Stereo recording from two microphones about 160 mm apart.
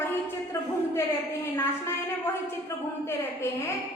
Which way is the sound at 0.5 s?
15° left (ahead or behind).